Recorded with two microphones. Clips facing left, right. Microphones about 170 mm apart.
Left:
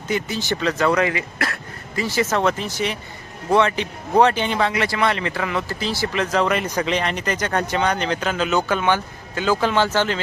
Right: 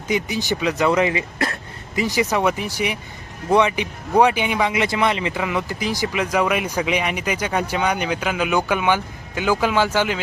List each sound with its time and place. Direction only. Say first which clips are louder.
0.1 s speech: right 1 dB; 15° right (ahead or behind)